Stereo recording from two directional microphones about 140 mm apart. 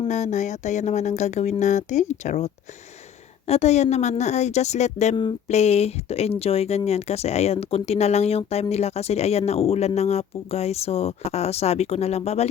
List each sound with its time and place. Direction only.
0.1 s speech: 55° left (ahead or behind)